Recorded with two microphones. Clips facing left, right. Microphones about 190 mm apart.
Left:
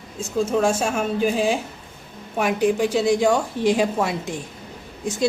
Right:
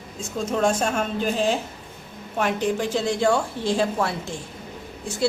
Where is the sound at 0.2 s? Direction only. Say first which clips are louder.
Left 3 dB; 5° left (ahead or behind).